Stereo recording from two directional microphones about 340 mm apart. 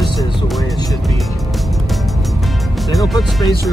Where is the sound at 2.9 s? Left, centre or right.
Centre.